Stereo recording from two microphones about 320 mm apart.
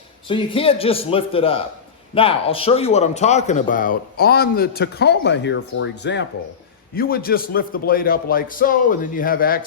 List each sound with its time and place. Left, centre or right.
0.3 s a man's voice: centre